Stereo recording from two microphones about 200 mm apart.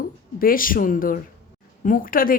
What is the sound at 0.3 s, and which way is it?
A woman's voice, 45° left (ahead or behind).